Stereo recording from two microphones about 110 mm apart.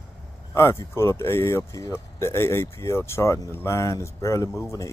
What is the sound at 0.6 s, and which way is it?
Speech, 25° left (ahead or behind).